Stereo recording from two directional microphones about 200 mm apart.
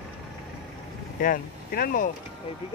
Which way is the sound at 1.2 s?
45° left (ahead or behind).